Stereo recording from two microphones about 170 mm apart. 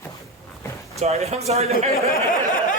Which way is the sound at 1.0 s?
40° right (ahead or behind).